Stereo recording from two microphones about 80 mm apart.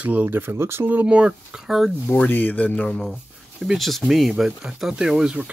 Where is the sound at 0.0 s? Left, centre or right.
Right.